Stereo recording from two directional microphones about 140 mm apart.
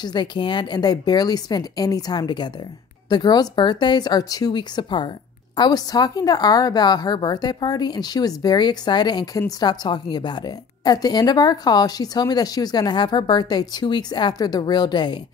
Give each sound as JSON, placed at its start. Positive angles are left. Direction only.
{"t": 0.0, "sound": "a woman's voice", "side_deg": 30}